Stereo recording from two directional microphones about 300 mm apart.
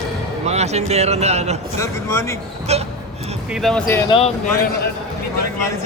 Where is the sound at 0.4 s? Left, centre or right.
Right.